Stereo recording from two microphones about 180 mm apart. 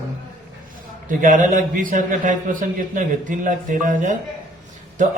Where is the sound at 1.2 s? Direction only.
45° right (ahead or behind).